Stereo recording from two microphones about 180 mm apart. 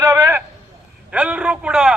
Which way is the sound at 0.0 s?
20° right (ahead or behind).